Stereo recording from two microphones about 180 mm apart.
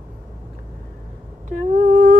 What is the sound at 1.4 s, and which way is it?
Humming, 50° right (ahead or behind).